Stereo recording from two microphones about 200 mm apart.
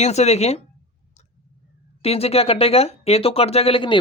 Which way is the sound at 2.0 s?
30° left (ahead or behind).